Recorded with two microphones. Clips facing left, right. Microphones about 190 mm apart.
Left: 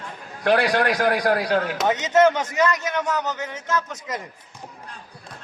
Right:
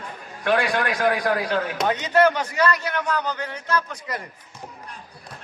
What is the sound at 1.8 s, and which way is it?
A man's voice, 20° left (ahead or behind).